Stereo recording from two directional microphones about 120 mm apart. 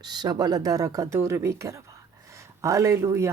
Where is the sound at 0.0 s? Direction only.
35° right (ahead or behind).